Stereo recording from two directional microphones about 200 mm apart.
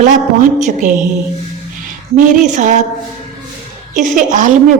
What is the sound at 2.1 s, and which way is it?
Speech, 40° right (ahead or behind).